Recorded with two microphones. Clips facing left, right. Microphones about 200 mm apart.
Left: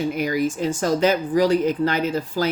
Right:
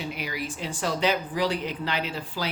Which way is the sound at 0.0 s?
45° left (ahead or behind).